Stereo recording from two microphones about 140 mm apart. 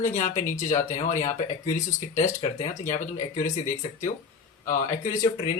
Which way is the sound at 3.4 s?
65° left (ahead or behind).